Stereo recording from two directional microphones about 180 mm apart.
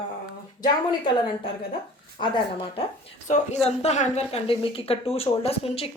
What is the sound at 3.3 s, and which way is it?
Speech, 40° left (ahead or behind).